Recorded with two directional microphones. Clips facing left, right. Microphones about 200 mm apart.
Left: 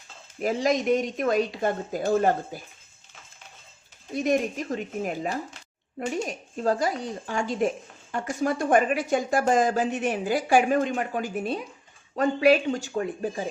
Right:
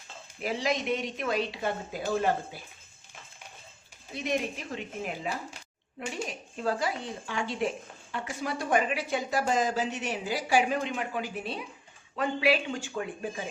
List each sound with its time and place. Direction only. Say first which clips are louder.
0.4 s speech: left 6 dB; 45° left (ahead or behind)
4.1 s speech: left 7 dB; 45° left (ahead or behind)